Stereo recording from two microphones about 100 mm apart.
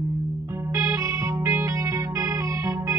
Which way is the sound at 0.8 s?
30° right (ahead or behind).